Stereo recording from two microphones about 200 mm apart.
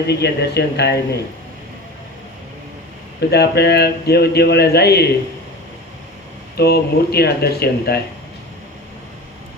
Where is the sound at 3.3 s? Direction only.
55° left (ahead or behind).